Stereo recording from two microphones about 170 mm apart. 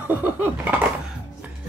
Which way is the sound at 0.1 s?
10° right (ahead or behind).